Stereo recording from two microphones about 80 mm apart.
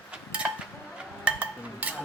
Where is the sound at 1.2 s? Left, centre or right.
Centre.